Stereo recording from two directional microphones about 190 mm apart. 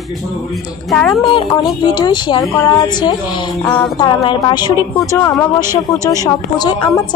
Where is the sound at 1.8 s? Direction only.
20° left (ahead or behind).